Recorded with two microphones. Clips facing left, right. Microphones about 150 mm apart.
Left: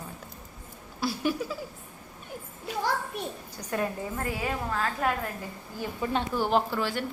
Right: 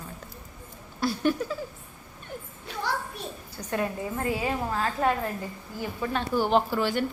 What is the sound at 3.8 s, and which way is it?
A woman's voice, 20° right (ahead or behind).